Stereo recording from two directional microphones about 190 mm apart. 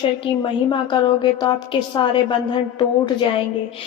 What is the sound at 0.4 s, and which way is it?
A woman's voice, 25° left (ahead or behind).